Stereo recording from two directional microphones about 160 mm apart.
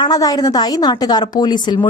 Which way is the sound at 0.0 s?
25° left (ahead or behind).